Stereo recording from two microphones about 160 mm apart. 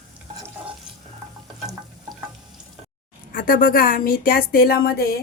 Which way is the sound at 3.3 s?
60° left (ahead or behind).